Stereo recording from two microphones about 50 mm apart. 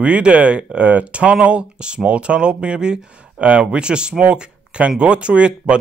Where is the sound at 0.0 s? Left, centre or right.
Right.